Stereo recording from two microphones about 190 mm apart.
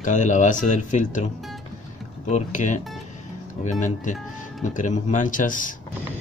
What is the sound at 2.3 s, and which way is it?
Speech, 40° left (ahead or behind).